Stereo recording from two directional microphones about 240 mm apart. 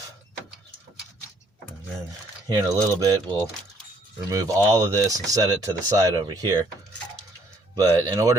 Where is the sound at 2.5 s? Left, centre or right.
Centre.